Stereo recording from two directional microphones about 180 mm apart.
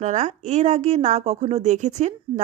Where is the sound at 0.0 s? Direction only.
40° right (ahead or behind).